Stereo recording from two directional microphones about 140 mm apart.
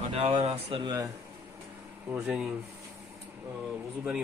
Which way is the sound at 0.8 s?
30° right (ahead or behind).